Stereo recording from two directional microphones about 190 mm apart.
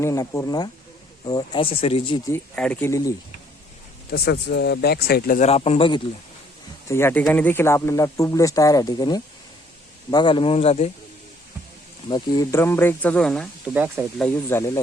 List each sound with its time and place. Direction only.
0.0 s speech: 15° left (ahead or behind)
2.3 s speech: 10° left (ahead or behind)
4.1 s speech: 60° left (ahead or behind)
5.4 s speech: 35° left (ahead or behind)
6.8 s speech: 15° left (ahead or behind); by 10.9 s 35° left (ahead or behind)
12.0 s speech: 20° left (ahead or behind); by 13.5 s 5° left (ahead or behind)
13.7 s speech: 10° right (ahead or behind)
14.2 s speech: 10° left (ahead or behind)